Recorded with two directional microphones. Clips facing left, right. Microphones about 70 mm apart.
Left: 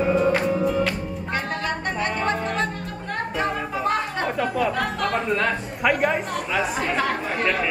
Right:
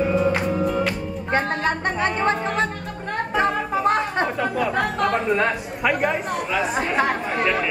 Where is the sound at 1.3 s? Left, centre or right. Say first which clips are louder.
Right 5 dB; right.